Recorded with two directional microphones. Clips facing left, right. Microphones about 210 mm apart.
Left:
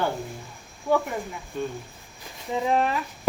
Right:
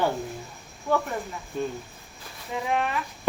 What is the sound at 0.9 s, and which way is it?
Speech, 10° left (ahead or behind).